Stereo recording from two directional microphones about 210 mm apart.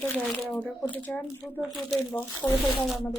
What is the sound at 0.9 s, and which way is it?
Speech, 10° left (ahead or behind).